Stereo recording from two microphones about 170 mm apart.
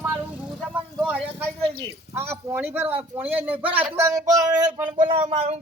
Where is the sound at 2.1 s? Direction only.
15° right (ahead or behind).